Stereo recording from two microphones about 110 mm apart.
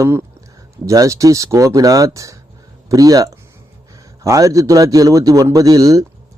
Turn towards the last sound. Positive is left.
turn(degrees=-30)  # may be behind; listen again after turning